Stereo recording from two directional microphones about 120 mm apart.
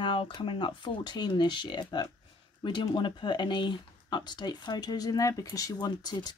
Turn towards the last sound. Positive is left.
turn(degrees=35)  # may be behind; listen again after turning